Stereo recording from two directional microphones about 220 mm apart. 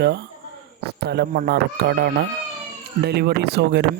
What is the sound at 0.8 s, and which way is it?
Speech, 50° right (ahead or behind).